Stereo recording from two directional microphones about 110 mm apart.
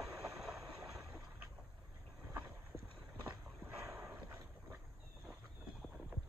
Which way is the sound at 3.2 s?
20° right (ahead or behind).